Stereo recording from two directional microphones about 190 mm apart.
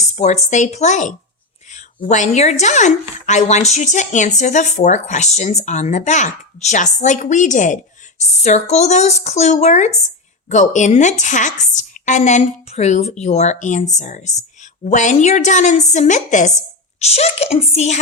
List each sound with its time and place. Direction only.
0.0 s speech: 35° left (ahead or behind)